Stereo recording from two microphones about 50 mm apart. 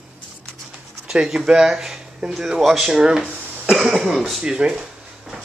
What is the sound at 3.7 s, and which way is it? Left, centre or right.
Speech, centre.